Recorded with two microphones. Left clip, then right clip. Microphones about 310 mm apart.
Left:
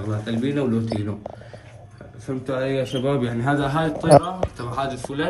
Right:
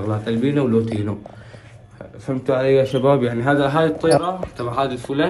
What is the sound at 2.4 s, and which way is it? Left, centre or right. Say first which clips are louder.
Speech: right 8 dB; centre.